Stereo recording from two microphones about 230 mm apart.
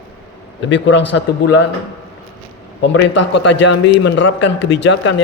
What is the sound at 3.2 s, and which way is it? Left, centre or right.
Speech, left.